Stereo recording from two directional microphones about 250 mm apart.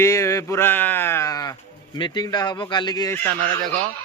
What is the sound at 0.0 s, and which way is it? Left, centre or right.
Speech, centre.